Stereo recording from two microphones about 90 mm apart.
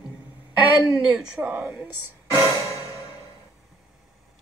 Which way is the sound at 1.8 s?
30° right (ahead or behind).